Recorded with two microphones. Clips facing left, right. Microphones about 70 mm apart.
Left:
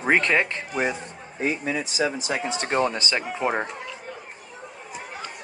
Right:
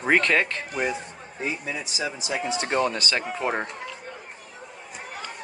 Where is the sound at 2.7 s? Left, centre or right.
Left.